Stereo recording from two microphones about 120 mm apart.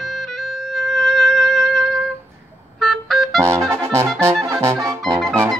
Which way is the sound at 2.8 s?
5° left (ahead or behind).